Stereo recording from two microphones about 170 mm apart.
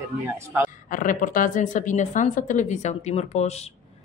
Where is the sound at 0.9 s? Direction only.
50° left (ahead or behind).